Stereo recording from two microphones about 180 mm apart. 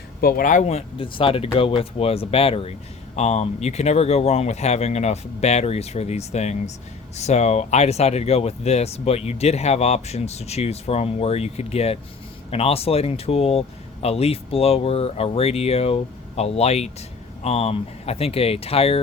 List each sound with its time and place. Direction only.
0.2 s speech: 55° left (ahead or behind); by 18.9 s 35° left (ahead or behind)